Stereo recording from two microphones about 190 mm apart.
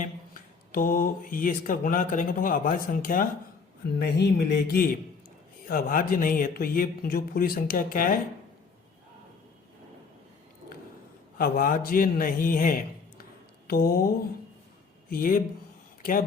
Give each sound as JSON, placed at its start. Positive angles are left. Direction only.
{"t": 0.0, "sound": "speech", "side_deg": 45}
{"t": 3.9, "sound": "speech", "side_deg": 55}
{"t": 11.3, "sound": "speech", "side_deg": 50}
{"t": 15.1, "sound": "speech", "side_deg": 50}